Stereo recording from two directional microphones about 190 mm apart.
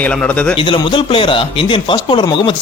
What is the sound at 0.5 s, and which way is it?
Speech, 25° left (ahead or behind).